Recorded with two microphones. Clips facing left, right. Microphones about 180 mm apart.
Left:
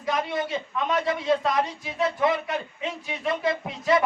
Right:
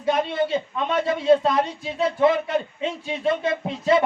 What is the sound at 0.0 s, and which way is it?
Speech, 30° right (ahead or behind).